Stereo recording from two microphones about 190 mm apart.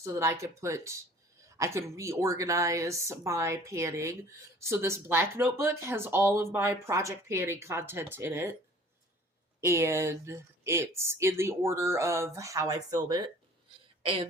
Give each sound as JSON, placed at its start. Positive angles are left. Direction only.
{"t": 0.0, "sound": "speech", "side_deg": -15}
{"t": 9.6, "sound": "speech", "side_deg": -15}